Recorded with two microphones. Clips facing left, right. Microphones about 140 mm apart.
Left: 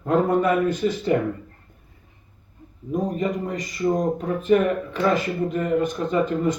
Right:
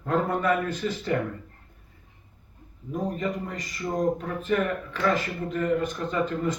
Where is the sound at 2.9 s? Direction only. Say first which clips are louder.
Left 5 dB; 15° left (ahead or behind).